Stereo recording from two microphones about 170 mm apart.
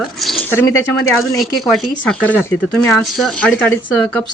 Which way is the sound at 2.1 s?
10° left (ahead or behind).